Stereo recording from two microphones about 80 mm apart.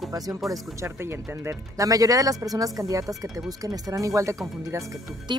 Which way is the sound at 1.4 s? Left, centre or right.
Right.